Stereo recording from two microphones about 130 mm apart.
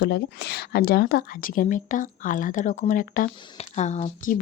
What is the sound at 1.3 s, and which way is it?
Speech, 90° left.